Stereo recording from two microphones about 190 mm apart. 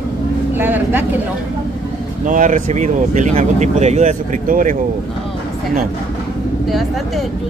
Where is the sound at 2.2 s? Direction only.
45° right (ahead or behind).